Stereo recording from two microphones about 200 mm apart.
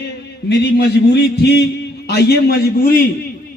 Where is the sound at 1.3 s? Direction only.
55° left (ahead or behind).